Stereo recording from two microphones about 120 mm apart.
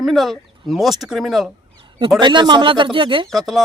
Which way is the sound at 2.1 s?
40° right (ahead or behind).